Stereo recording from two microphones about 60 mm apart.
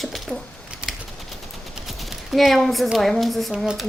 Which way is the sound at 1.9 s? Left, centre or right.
Centre.